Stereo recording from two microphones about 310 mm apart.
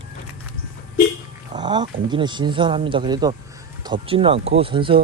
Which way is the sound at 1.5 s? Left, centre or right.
Centre.